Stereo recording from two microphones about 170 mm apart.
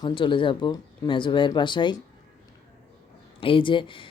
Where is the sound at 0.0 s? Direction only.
30° left (ahead or behind).